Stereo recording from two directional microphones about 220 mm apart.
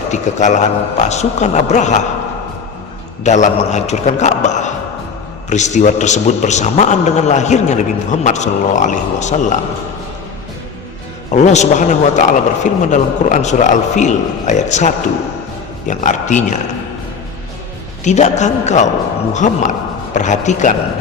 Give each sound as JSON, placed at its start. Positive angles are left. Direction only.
{"t": 0.1, "sound": "a man's voice", "side_deg": 30}
{"t": 3.2, "sound": "a man's voice", "side_deg": 30}
{"t": 11.3, "sound": "a man's voice", "side_deg": 30}
{"t": 18.0, "sound": "a man's voice", "side_deg": 30}